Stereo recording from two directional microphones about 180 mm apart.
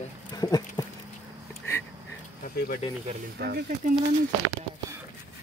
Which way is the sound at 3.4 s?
65° right (ahead or behind).